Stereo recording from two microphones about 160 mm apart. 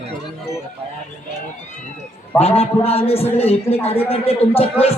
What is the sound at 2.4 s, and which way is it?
A man's voice, 40° left (ahead or behind).